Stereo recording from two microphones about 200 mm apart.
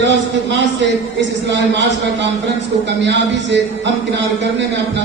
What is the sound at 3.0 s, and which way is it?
A man's voice, 60° right (ahead or behind).